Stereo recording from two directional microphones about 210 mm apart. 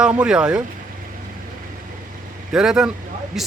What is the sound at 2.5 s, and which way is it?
Speech, 5° right (ahead or behind).